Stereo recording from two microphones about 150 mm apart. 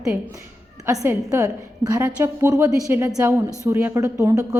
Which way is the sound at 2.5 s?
20° right (ahead or behind).